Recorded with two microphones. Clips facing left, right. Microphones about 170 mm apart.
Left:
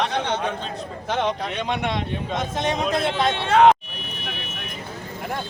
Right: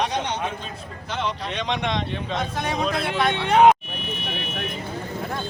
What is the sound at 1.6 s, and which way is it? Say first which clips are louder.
Speech: even; 5° left (ahead or behind).